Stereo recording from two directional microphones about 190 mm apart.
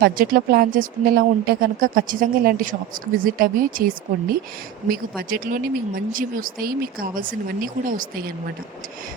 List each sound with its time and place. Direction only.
0.0 s speech: 50° right (ahead or behind)